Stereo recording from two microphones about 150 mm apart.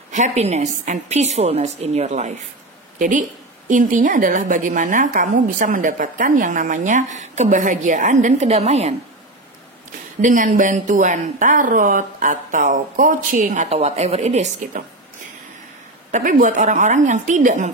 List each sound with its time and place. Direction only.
0.1 s a woman's voice: 50° right (ahead or behind)
10.2 s a woman's voice: 60° right (ahead or behind)
16.1 s a woman's voice: 55° right (ahead or behind)